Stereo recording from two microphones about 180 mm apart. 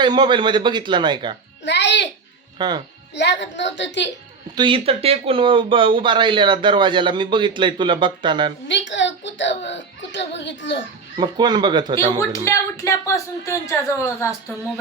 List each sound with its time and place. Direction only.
0.0 s speech: 25° right (ahead or behind)
1.6 s a child's voice: 75° left (ahead or behind)
2.6 s speech: 25° right (ahead or behind)
3.2 s a woman's voice: 75° left (ahead or behind)
4.5 s speech: 30° right (ahead or behind)
8.6 s a woman's voice: 85° left
11.2 s speech: 25° right (ahead or behind)
12.3 s speech: 15° left (ahead or behind)